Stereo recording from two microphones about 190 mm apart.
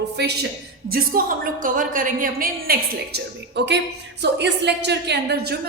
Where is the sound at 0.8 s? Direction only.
50° right (ahead or behind).